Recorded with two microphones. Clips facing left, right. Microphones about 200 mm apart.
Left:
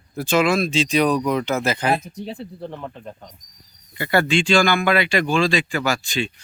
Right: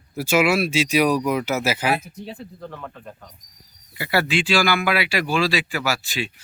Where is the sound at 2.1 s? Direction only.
35° left (ahead or behind).